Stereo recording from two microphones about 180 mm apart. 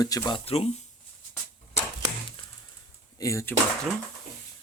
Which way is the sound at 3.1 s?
15° left (ahead or behind).